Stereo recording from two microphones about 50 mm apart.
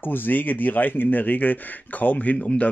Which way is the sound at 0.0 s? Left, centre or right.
Left.